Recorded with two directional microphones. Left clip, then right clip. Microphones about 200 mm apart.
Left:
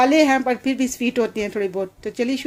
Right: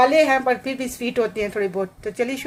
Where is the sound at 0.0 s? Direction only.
45° left (ahead or behind).